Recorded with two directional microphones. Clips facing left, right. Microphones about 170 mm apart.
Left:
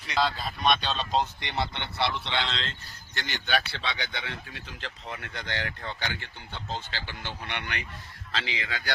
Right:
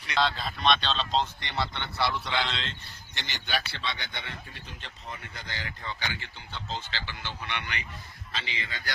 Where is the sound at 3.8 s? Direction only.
90° left; by 7.8 s 55° left (ahead or behind).